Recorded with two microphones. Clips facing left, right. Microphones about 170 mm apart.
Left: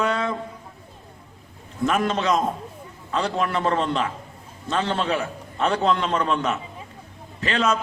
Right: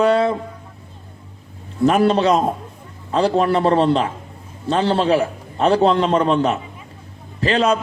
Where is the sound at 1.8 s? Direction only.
35° right (ahead or behind).